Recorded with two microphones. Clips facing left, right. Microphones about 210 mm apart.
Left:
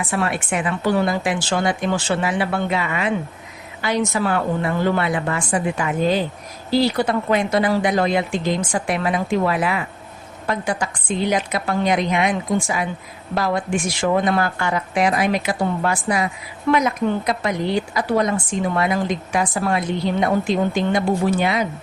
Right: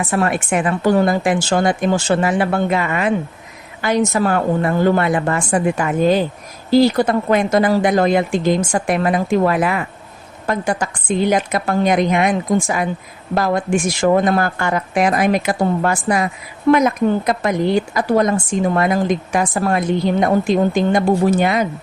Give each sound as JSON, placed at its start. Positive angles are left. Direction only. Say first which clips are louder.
{"t": 0.1, "sound": "speech", "louder": "right 5 dB", "side_deg": -45}